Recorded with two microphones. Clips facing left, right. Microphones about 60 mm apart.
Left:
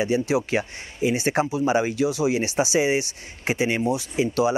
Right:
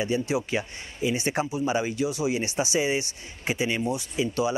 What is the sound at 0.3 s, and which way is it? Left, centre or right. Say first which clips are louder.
Speech: left 4 dB; left.